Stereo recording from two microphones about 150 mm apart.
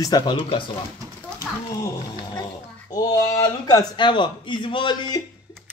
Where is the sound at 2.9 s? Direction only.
25° left (ahead or behind).